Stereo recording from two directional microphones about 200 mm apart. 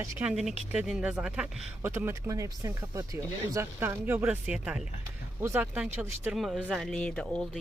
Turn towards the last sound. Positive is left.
turn(degrees=5)  # may be behind; listen again after turning